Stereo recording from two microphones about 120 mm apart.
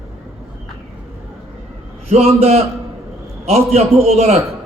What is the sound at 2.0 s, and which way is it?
A man's voice, 55° right (ahead or behind).